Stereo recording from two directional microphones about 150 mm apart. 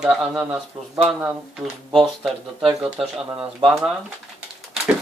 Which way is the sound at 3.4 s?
35° right (ahead or behind).